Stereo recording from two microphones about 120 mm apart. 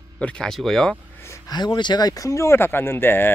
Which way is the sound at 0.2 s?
5° left (ahead or behind).